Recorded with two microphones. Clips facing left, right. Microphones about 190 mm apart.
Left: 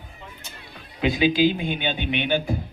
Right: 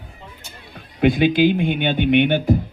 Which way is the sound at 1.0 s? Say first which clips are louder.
Right 4 dB; 55° right (ahead or behind).